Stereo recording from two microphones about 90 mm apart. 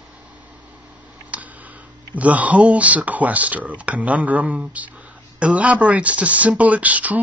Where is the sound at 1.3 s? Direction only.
15° right (ahead or behind).